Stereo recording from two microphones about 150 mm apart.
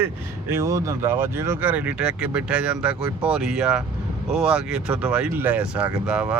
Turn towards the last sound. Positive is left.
turn(degrees=-5)  # may be behind; listen again after turning